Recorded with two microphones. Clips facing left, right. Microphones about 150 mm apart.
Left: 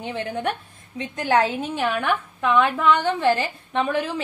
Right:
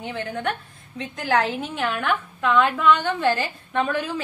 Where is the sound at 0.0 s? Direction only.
20° left (ahead or behind).